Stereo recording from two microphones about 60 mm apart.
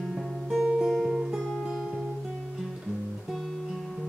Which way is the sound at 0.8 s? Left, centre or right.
Centre.